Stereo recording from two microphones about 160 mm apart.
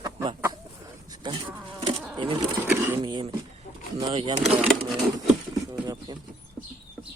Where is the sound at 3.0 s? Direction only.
30° right (ahead or behind).